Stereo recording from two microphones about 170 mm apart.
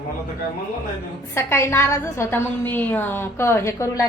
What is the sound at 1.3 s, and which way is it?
A woman's voice, 15° left (ahead or behind).